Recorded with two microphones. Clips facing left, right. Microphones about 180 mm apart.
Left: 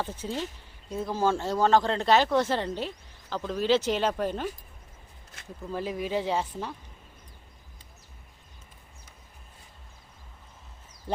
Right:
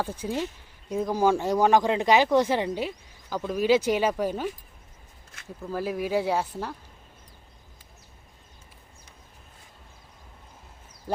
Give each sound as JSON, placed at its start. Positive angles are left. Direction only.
{"t": 0.0, "sound": "speech", "side_deg": -10}
{"t": 5.7, "sound": "speech", "side_deg": -5}